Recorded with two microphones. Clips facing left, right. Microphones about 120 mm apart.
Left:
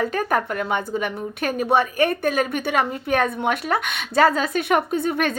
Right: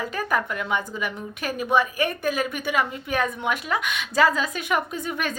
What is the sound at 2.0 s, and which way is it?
Speech, 40° left (ahead or behind).